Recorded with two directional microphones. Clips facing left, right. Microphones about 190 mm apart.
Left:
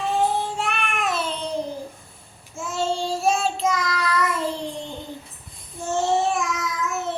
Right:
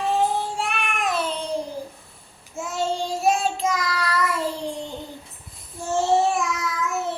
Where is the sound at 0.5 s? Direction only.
10° right (ahead or behind).